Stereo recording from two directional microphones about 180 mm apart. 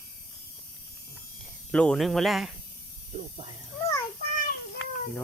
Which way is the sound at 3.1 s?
30° right (ahead or behind).